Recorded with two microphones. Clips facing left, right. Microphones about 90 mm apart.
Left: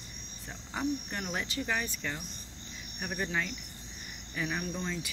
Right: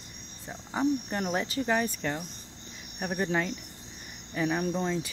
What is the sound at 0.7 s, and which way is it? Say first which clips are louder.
Cricket: right 6 dB; 30° right (ahead or behind).